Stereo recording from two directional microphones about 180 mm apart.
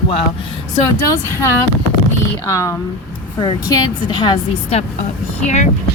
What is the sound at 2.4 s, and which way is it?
A woman's voice, 15° left (ahead or behind).